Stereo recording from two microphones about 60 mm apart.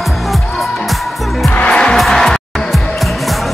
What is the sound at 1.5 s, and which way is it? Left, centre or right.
Music, left.